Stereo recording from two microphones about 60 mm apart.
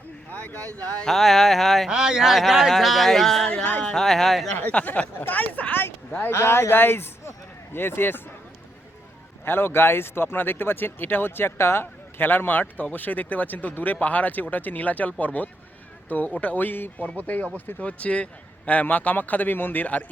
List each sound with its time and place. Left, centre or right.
0.3 s speech: left
1.0 s a man's voice: centre
1.9 s a man's voice: centre
3.4 s a man's voice: left
3.9 s a man's voice: centre
4.5 s speech: left
5.3 s a sound: left
6.3 s speech: left
9.4 s a man's voice: left